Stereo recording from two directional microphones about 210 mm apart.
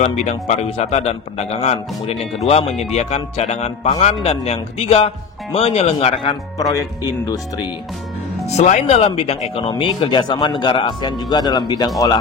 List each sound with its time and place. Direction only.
0.0 s a man's voice: 35° left (ahead or behind); by 7.3 s 15° left (ahead or behind)
8.5 s speech: 35° left (ahead or behind)